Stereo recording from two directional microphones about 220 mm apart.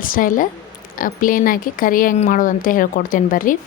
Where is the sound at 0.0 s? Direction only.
40° left (ahead or behind).